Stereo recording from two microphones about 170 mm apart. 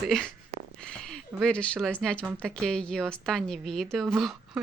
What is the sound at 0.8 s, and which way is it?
A woman's voice, 5° left (ahead or behind).